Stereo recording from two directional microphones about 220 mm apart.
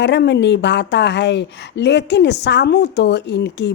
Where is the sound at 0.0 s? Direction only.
50° left (ahead or behind).